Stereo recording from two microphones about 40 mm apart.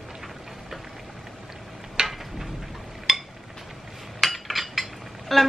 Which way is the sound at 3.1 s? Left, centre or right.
Centre.